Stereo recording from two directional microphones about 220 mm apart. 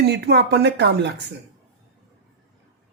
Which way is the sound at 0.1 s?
50° right (ahead or behind).